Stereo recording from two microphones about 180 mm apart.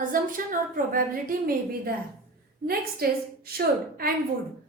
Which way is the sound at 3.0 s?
60° right (ahead or behind).